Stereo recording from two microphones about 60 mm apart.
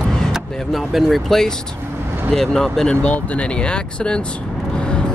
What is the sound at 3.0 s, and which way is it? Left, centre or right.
Speech, left.